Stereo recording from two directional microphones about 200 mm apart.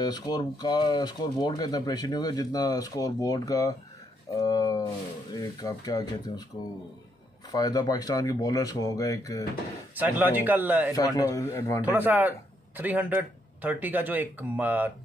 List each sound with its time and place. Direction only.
0.0 s speech: 20° left (ahead or behind)
7.5 s speech: 20° left (ahead or behind)
9.9 s a man's voice: 10° right (ahead or behind)
11.0 s speech: 15° left (ahead or behind)
11.8 s a man's voice: 10° right (ahead or behind)